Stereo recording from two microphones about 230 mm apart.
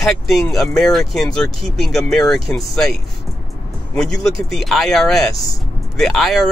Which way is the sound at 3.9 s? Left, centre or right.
Centre.